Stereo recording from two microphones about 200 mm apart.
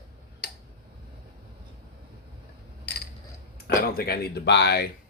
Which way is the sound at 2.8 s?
55° left (ahead or behind).